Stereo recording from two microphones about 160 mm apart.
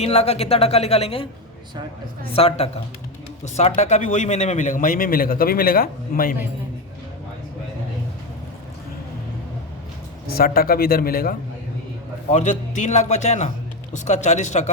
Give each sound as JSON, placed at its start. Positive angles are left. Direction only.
{"t": 0.0, "sound": "a woman's voice", "side_deg": 40}
{"t": 2.3, "sound": "a woman's voice", "side_deg": 40}
{"t": 10.3, "sound": "a man's voice", "side_deg": 70}
{"t": 12.3, "sound": "a man's voice", "side_deg": 50}